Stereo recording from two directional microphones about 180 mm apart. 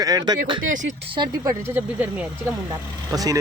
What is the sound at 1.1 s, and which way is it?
Speech, 25° right (ahead or behind).